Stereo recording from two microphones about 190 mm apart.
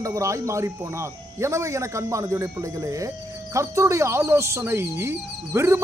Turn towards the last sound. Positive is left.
turn(degrees=-15)  # may be behind; listen again after turning